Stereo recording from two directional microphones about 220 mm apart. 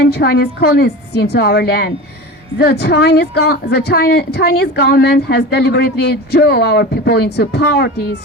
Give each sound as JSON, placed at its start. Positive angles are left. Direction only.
{"t": 0.1, "sound": "a woman's voice", "side_deg": 45}